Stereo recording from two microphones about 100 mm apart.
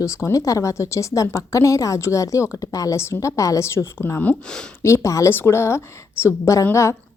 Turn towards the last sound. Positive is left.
turn(degrees=30)  # may be behind; listen again after turning